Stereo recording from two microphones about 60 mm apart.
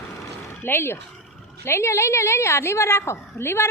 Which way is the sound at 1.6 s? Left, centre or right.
Left.